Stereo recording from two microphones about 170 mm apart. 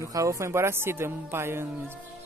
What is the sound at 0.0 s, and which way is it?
Speech, 20° right (ahead or behind).